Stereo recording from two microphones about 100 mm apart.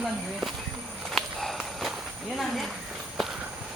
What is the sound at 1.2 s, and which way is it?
Walk, 5° left (ahead or behind).